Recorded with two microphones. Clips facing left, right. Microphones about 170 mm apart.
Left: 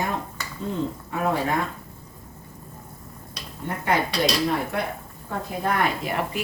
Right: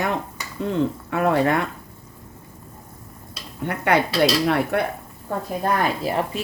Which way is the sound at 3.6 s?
70° right (ahead or behind).